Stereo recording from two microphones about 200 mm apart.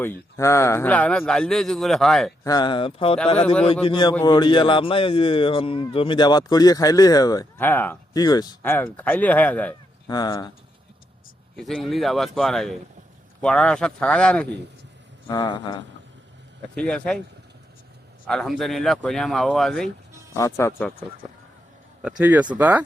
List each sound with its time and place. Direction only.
0.0 s speech: 10° left (ahead or behind)
2.4 s a man's voice: 20° left (ahead or behind)
4.1 s speech: 10° left (ahead or behind)
4.4 s a man's voice: 25° left (ahead or behind); by 9.7 s 10° left (ahead or behind)
10.1 s a man's voice: 20° left (ahead or behind)
11.5 s speech: centre (ahead or behind)
15.3 s a man's voice: 20° left (ahead or behind)
16.7 s speech: 5° left (ahead or behind)
18.3 s speech: centre (ahead or behind)
20.3 s speech: 15° left (ahead or behind)
22.0 s a man's voice: 5° right (ahead or behind)